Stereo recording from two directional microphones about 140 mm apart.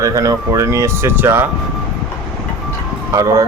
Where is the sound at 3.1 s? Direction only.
25° right (ahead or behind).